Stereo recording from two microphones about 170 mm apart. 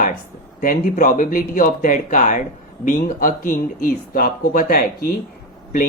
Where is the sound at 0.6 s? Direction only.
55° left (ahead or behind).